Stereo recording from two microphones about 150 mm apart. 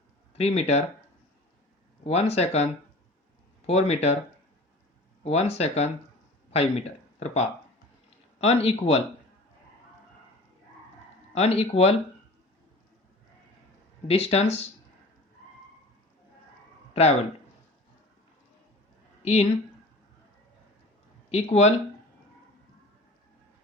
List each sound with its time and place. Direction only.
0.3 s speech: 45° left (ahead or behind)
2.0 s speech: 45° left (ahead or behind)
3.7 s speech: 45° left (ahead or behind)
5.2 s speech: 45° left (ahead or behind)
11.3 s speech: 45° left (ahead or behind)
14.1 s speech: 45° left (ahead or behind)
16.9 s speech: 45° left (ahead or behind)
19.2 s a woman's voice: 45° left (ahead or behind)
21.2 s speech: 45° left (ahead or behind)